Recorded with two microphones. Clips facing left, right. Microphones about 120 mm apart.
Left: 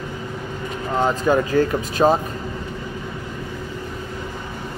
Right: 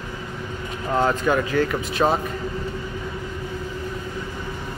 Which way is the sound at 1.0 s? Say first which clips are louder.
Left 4 dB; 25° left (ahead or behind).